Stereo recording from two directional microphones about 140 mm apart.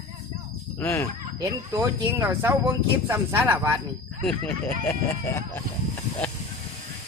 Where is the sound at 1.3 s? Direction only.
25° right (ahead or behind).